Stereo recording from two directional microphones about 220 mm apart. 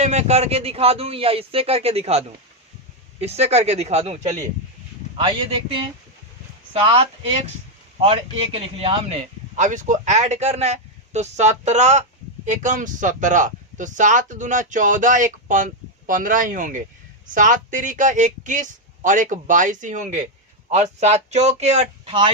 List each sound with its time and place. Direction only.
0.0 s speech: 30° right (ahead or behind)
8.0 s speech: 25° right (ahead or behind)